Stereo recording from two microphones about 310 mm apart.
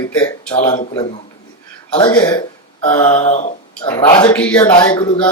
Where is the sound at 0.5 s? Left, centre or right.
Left.